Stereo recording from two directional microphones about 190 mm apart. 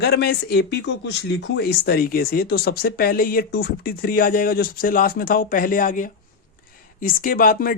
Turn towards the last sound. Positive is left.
turn(degrees=45)  # may be behind; listen again after turning